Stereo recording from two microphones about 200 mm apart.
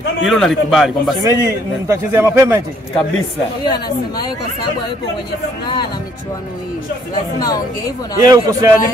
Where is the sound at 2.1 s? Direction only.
10° right (ahead or behind).